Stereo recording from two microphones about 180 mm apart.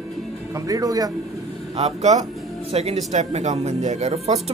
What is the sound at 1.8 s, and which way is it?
A man's voice, 35° right (ahead or behind).